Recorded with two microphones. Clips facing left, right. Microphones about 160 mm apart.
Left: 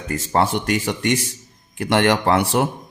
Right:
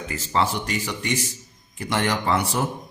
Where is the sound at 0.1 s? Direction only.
45° left (ahead or behind).